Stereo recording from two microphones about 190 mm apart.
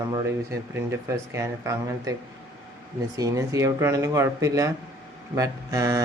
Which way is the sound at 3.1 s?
20° right (ahead or behind).